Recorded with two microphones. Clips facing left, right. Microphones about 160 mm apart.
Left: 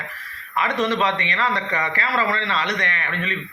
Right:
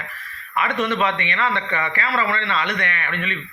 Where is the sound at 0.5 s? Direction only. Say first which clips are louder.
Even; 35° left (ahead or behind).